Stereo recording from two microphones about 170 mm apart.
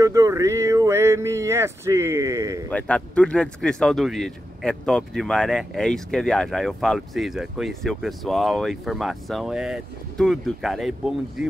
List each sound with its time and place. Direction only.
0.0 s speech: 20° right (ahead or behind)
2.7 s speech: 5° left (ahead or behind)